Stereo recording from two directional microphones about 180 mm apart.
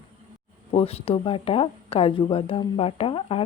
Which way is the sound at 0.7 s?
35° left (ahead or behind).